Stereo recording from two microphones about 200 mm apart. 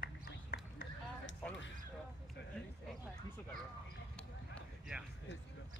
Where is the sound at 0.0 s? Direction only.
45° left (ahead or behind).